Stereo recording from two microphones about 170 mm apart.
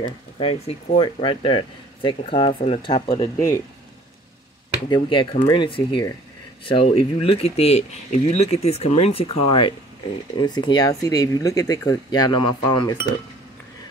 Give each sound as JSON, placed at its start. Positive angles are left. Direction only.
{"t": 0.0, "sound": "speech", "side_deg": 35}
{"t": 3.3, "sound": "speech", "side_deg": 15}
{"t": 4.8, "sound": "speech", "side_deg": 30}